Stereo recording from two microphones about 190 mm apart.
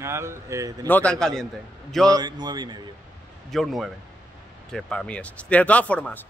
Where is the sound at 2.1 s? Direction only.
20° right (ahead or behind).